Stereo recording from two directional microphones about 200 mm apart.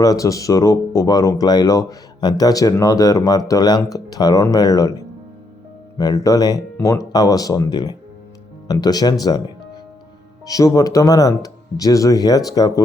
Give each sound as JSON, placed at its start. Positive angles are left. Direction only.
{"t": 0.0, "sound": "speech", "side_deg": 15}
{"t": 9.2, "sound": "music", "side_deg": 20}
{"t": 10.4, "sound": "speech", "side_deg": 15}